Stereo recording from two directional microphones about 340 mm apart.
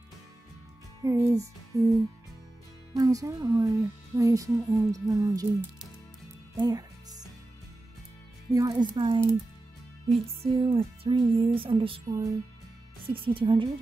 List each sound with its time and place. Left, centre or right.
1.0 s speech: centre
2.9 s speech: centre
6.5 s music: centre
8.5 s speech: centre
10.4 s speech: centre